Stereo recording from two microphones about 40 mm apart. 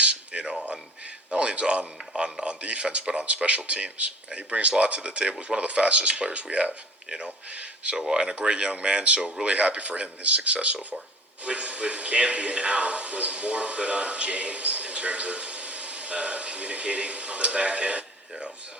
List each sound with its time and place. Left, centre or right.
0.0 s a sound: right
1.3 s speech: right
7.1 s speech: centre
7.5 s speech: right
7.9 s speech: centre
8.2 s speech: right